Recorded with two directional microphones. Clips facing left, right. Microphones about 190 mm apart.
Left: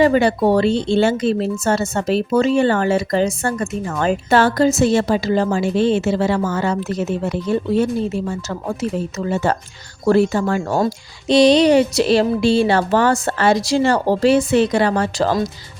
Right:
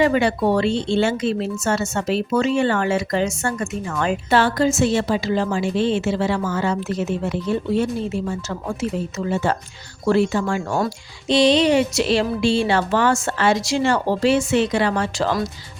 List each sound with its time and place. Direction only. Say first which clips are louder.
0.0 s speech: left 3 dB; 40° left (ahead or behind)